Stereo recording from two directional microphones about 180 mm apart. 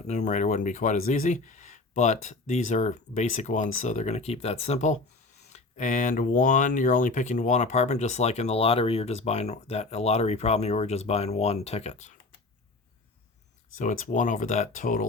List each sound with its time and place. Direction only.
0.1 s speech: 45° left (ahead or behind)
13.7 s speech: 45° left (ahead or behind)